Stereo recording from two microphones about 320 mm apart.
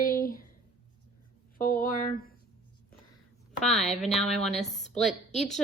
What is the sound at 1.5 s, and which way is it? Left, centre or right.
Speech, left.